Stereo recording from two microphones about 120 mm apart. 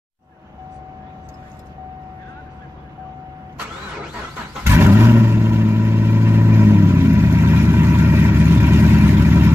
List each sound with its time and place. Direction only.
4.6 s vehicle: 20° right (ahead or behind)